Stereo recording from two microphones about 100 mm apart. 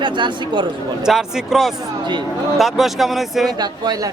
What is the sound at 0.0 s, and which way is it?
Speech, 55° right (ahead or behind).